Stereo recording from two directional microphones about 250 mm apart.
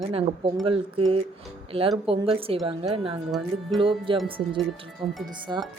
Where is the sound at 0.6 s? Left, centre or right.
Right.